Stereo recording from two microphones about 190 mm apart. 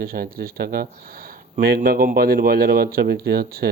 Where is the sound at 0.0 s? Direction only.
50° right (ahead or behind).